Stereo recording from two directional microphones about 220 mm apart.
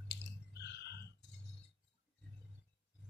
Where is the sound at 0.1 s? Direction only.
50° left (ahead or behind).